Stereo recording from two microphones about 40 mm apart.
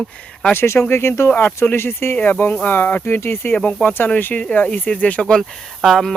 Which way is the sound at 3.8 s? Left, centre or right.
Left.